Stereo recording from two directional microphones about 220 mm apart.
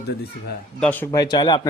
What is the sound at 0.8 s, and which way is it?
Speech, 10° left (ahead or behind).